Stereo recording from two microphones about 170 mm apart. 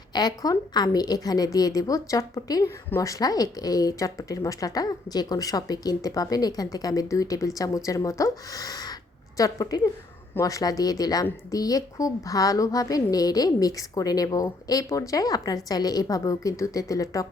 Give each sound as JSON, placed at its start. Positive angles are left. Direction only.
{"t": 0.1, "sound": "a woman's voice", "side_deg": 25}